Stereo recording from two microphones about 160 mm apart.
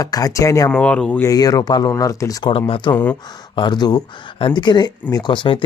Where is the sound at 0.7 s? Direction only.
5° left (ahead or behind).